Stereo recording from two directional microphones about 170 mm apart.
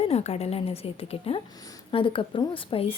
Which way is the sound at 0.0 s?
40° left (ahead or behind).